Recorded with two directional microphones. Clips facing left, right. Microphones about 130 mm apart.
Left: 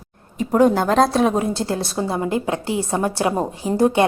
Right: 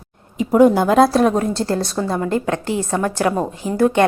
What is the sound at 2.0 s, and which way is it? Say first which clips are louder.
A woman's voice: right 2 dB; 15° left (ahead or behind).